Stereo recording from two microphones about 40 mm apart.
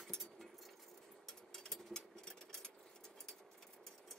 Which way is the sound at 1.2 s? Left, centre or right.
Centre.